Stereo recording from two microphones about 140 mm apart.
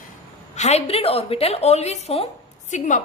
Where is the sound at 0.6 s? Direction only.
50° left (ahead or behind).